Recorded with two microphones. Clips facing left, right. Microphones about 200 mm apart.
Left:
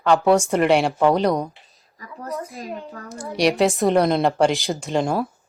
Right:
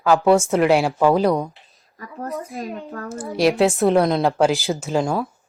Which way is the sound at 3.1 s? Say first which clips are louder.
Right 2 dB; centre (ahead or behind).